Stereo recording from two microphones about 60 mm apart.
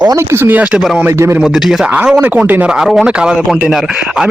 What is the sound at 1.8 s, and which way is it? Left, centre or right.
Speech, right.